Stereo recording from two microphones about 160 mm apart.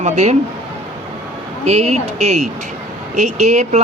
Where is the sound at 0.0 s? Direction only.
45° right (ahead or behind).